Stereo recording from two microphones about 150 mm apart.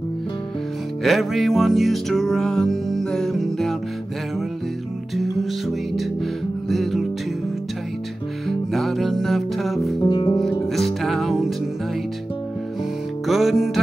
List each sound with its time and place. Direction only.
1.0 s music: centre (ahead or behind)
5.1 s music: centre (ahead or behind)
6.7 s music: centre (ahead or behind)
8.5 s music: centre (ahead or behind)
9.9 s music: 30° left (ahead or behind)
10.9 s music: centre (ahead or behind)
13.3 s music: centre (ahead or behind)